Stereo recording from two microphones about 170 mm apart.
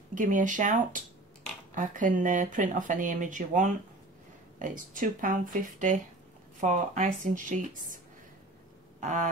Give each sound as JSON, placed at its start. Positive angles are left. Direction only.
{"t": 0.1, "sound": "speech", "side_deg": -50}
{"t": 9.0, "sound": "speech", "side_deg": -45}